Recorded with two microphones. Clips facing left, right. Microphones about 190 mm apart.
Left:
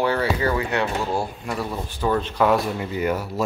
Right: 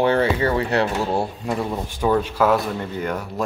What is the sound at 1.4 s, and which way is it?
Speech, 20° right (ahead or behind).